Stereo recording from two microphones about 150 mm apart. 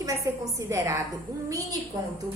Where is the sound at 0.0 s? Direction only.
20° right (ahead or behind).